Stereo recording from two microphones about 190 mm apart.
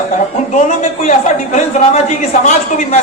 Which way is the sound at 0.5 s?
40° left (ahead or behind).